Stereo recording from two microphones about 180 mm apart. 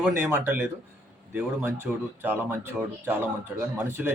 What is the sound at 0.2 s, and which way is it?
Speech, 10° right (ahead or behind).